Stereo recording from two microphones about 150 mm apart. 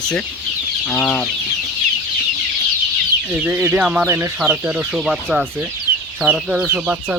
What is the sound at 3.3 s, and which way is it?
Speech, 10° right (ahead or behind).